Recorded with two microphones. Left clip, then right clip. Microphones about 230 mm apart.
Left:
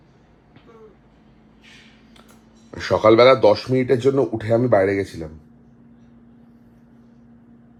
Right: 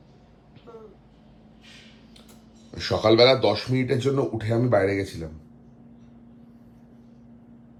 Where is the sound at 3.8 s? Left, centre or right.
Centre.